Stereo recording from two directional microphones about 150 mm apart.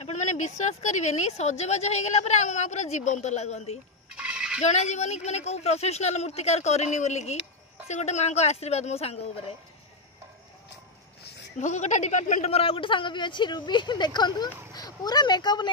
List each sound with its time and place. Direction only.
0.0 s speech: 55° left (ahead or behind)
4.2 s fowl: 5° right (ahead or behind)
4.6 s speech: 50° left (ahead or behind)
11.6 s speech: 50° left (ahead or behind); by 15.7 s 30° left (ahead or behind)